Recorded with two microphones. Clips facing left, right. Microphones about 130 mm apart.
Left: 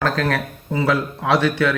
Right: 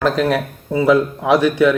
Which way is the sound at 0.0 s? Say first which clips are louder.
Right 4 dB; 15° right (ahead or behind).